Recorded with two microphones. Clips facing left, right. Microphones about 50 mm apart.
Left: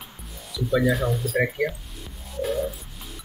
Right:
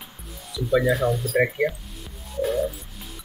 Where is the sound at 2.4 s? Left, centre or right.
Centre.